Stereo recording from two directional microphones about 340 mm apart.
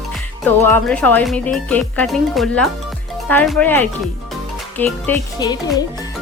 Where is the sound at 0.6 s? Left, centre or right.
Centre.